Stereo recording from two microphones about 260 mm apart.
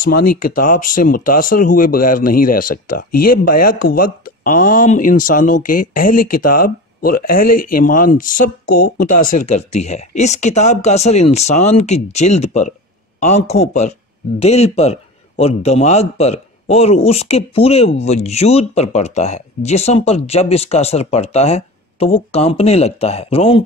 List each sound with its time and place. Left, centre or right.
0.0 s a man's voice: left